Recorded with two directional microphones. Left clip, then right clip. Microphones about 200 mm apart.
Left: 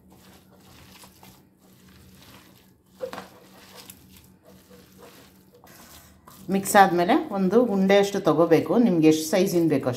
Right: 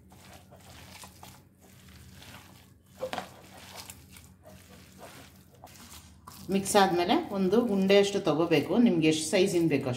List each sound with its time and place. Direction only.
6.8 s a woman's voice: 25° left (ahead or behind)